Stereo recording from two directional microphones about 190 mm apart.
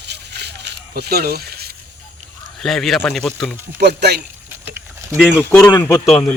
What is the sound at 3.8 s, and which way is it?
Speech, 60° right (ahead or behind).